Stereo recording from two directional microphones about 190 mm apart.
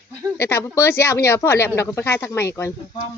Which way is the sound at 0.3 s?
15° left (ahead or behind).